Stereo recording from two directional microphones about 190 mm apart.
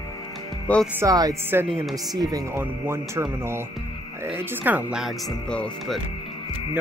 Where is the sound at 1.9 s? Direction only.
20° right (ahead or behind); by 6.0 s 5° left (ahead or behind).